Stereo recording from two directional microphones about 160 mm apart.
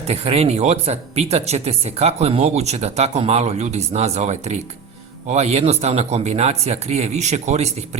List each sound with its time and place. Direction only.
0.1 s speech: 40° right (ahead or behind)